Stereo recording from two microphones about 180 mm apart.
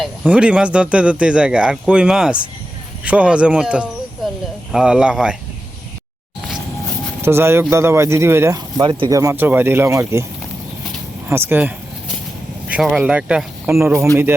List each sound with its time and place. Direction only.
0.0 s speech: 5° right (ahead or behind)
7.2 s speech: 15° right (ahead or behind)
11.3 s speech: 10° right (ahead or behind)